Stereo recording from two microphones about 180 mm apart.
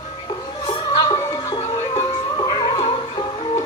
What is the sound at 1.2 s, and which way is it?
Music, 20° left (ahead or behind).